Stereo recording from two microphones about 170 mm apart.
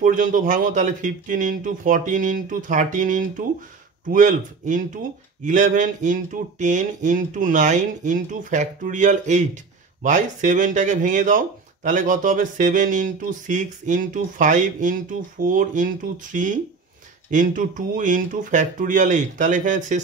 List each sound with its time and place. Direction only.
0.0 s speech: 50° right (ahead or behind)